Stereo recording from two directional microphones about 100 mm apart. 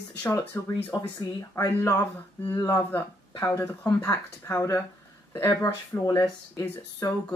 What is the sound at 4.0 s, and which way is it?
Speech, 35° left (ahead or behind).